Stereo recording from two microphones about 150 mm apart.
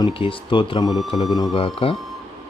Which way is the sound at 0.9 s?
Centre (ahead or behind).